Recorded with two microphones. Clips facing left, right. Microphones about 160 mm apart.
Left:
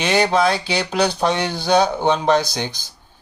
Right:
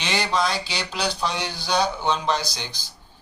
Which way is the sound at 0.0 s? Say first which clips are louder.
Left 7 dB; 55° left (ahead or behind).